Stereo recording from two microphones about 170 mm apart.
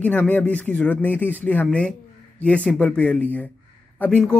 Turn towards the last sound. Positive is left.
turn(degrees=5)  # may be behind; listen again after turning